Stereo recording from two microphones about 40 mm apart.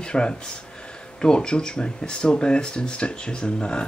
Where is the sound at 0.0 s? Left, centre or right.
Left.